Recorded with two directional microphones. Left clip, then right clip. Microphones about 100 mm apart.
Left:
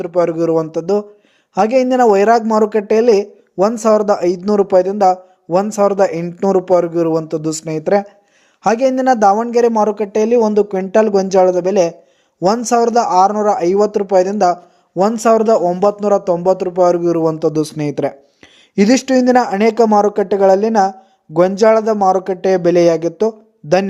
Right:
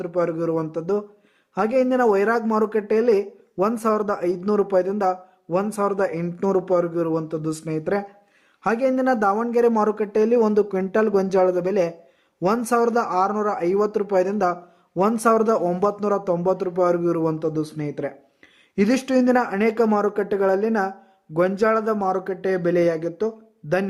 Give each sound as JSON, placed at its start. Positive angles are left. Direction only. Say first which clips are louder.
{"t": 0.0, "sound": "speech", "louder": "left 8 dB", "side_deg": 40}
{"t": 9.7, "sound": "speech", "louder": "left 6 dB", "side_deg": 20}
{"t": 17.5, "sound": "speech", "louder": "left 9 dB", "side_deg": 90}
{"t": 18.8, "sound": "speech", "louder": "left 8 dB", "side_deg": 35}